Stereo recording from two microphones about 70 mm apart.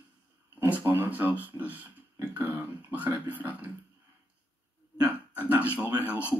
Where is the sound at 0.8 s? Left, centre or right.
Right.